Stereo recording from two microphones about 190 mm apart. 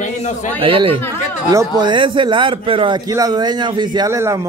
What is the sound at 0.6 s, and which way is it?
A man's voice, 30° right (ahead or behind).